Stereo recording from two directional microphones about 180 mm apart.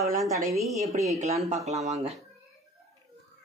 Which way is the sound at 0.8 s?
Centre (ahead or behind).